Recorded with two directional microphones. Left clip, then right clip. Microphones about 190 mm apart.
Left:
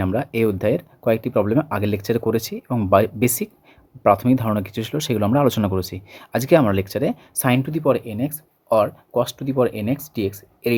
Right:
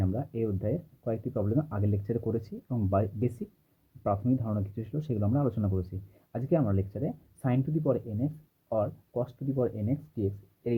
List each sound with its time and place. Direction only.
0.0 s speech: 45° left (ahead or behind)